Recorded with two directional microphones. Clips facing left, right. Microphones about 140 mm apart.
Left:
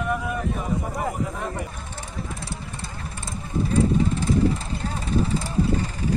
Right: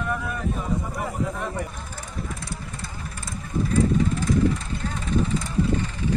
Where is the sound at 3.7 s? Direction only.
30° left (ahead or behind).